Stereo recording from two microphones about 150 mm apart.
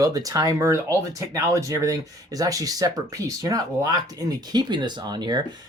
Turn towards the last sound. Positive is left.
turn(degrees=-30)  # may be behind; listen again after turning